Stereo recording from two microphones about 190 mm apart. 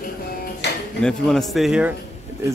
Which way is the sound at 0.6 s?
65° left (ahead or behind).